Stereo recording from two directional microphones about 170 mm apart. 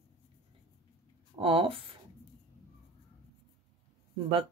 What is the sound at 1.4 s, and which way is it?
Speech, 35° right (ahead or behind).